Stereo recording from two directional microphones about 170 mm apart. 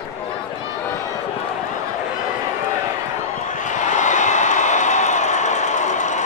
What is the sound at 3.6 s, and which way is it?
Crowd, 45° left (ahead or behind).